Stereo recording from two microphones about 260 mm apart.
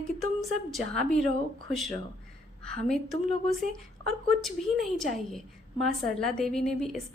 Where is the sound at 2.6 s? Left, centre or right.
Centre.